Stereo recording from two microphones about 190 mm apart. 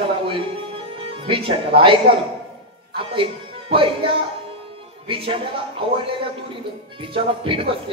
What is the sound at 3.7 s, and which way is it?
Speech, 25° right (ahead or behind).